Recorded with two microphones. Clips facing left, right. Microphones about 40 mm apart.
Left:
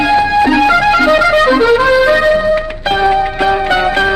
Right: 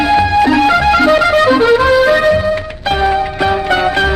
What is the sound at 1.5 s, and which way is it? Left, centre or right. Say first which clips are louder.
Music: even; centre.